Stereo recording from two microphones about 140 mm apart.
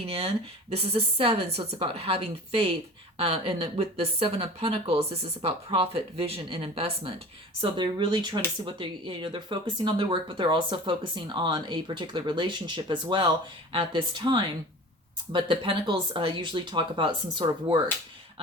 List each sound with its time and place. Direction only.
0.0 s speech: 45° right (ahead or behind)